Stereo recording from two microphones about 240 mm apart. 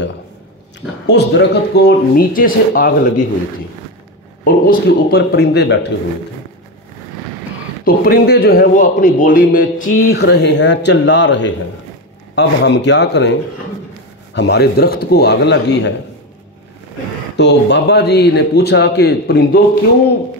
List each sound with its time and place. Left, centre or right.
1.0 s speech: left
4.6 s a man's voice: left
7.8 s a man's voice: left
17.4 s a man's voice: left